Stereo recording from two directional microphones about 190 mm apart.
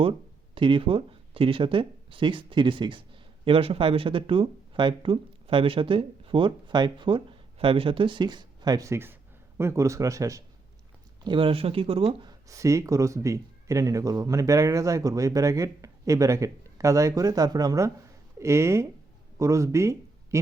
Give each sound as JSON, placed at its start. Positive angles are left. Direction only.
{"t": 0.5, "sound": "speech", "side_deg": -25}